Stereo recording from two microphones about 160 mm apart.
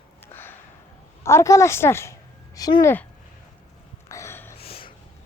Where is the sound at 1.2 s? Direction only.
15° left (ahead or behind).